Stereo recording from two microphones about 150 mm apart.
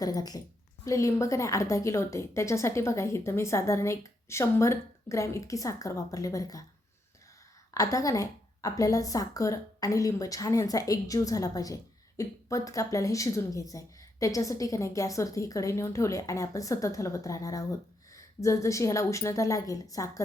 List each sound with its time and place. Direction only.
0.0 s a woman's voice: 25° left (ahead or behind)
7.7 s a woman's voice: 20° left (ahead or behind)